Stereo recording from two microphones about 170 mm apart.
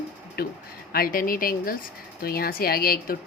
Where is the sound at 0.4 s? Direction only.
60° left (ahead or behind).